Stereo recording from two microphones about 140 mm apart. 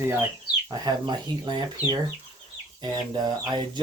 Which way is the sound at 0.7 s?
30° right (ahead or behind).